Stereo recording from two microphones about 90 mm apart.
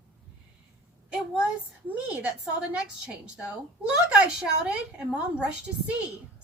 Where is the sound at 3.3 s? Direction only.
10° right (ahead or behind).